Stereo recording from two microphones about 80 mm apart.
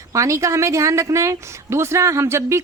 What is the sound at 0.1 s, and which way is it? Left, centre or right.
A woman's voice, right.